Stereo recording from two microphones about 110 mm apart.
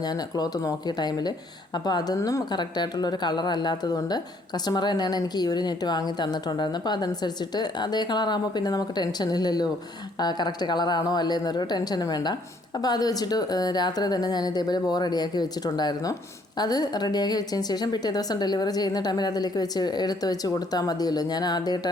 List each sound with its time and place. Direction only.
0.0 s a woman's voice: 35° left (ahead or behind)